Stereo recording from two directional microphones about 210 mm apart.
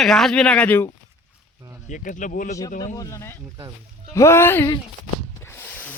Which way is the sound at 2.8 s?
15° left (ahead or behind).